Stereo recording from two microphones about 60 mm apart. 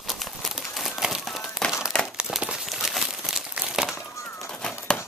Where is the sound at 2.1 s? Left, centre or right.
Centre.